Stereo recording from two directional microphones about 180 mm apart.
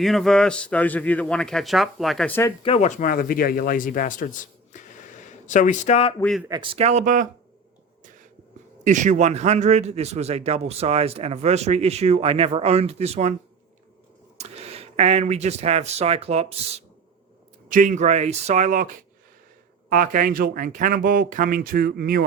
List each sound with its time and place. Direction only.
0.0 s a man's voice: centre (ahead or behind)
2.6 s speech: 40° left (ahead or behind)
4.7 s a sound: 45° left (ahead or behind)
6.5 s a man's voice: 30° right (ahead or behind); by 7.3 s 45° right (ahead or behind)
8.8 s a man's voice: 40° right (ahead or behind)
14.3 s speech: 35° right (ahead or behind)
17.7 s a man's voice: 45° right (ahead or behind)